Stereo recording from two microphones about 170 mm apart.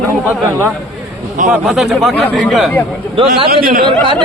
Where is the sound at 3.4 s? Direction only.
60° right (ahead or behind).